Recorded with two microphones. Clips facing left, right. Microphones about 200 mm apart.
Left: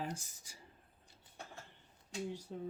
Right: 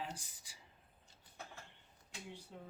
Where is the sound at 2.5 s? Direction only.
35° left (ahead or behind).